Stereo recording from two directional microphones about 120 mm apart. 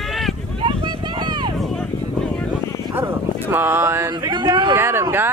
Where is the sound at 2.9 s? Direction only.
20° right (ahead or behind).